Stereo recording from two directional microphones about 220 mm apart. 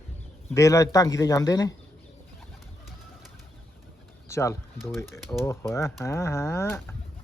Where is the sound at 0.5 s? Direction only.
15° left (ahead or behind).